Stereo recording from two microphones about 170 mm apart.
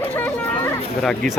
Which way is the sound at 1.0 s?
Centre (ahead or behind).